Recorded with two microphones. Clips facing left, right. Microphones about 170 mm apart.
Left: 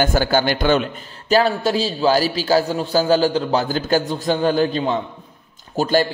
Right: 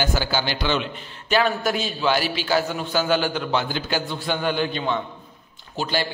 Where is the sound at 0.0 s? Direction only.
50° left (ahead or behind).